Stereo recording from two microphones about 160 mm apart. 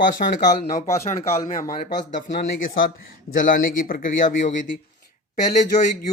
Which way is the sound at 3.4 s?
60° left (ahead or behind).